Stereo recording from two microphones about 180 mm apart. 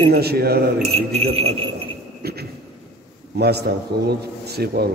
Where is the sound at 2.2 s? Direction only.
60° right (ahead or behind).